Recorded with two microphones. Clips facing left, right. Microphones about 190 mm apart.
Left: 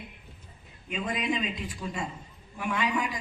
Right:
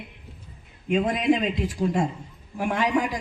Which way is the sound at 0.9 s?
50° right (ahead or behind).